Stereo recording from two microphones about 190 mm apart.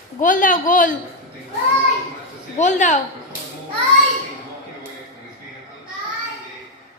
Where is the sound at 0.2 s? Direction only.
45° left (ahead or behind).